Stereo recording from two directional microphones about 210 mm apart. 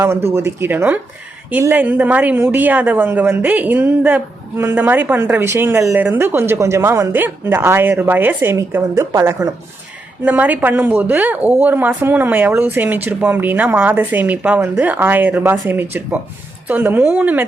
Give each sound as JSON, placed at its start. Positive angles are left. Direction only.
{"t": 0.3, "sound": "a woman's voice", "side_deg": -10}